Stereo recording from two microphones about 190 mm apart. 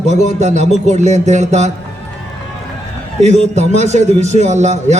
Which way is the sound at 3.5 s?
35° right (ahead or behind).